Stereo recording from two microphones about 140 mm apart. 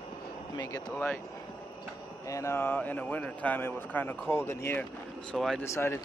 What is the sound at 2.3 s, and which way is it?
A man's voice, 20° left (ahead or behind).